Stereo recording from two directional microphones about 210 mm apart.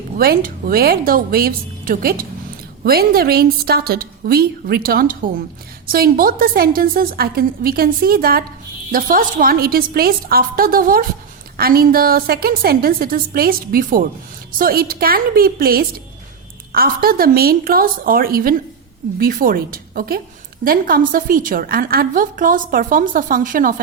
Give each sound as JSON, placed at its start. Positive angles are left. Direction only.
{"t": 0.2, "sound": "a woman's voice", "side_deg": -45}